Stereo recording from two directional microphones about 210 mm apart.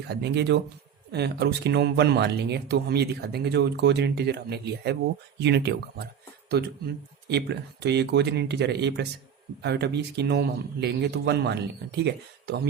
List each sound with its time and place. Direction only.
0.1 s speech: 55° right (ahead or behind)